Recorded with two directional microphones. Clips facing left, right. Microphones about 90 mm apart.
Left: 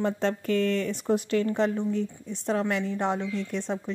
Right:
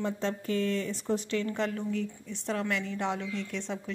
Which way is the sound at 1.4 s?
35° left (ahead or behind).